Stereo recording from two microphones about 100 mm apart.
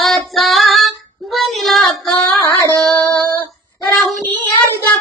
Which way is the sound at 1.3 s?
Centre (ahead or behind).